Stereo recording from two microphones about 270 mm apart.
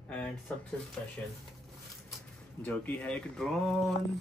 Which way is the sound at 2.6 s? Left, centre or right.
Centre.